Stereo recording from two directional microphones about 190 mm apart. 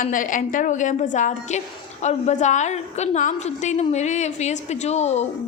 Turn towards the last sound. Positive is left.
turn(degrees=35)  # may be behind; listen again after turning